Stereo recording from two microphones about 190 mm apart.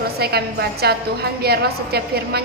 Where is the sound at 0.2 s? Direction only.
55° right (ahead or behind).